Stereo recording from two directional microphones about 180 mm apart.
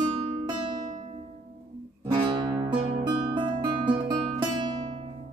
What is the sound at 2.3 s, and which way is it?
Music, 20° right (ahead or behind).